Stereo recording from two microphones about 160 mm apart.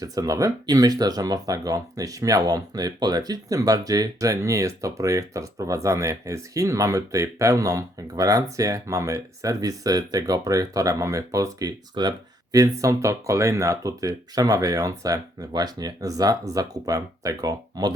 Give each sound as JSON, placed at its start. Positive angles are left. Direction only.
{"t": 0.0, "sound": "speech", "side_deg": -20}